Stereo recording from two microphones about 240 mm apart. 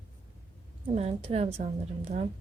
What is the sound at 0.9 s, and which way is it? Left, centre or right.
Speech, right.